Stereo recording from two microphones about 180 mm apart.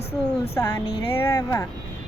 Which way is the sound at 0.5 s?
15° left (ahead or behind).